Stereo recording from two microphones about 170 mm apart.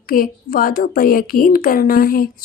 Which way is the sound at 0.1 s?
55° left (ahead or behind).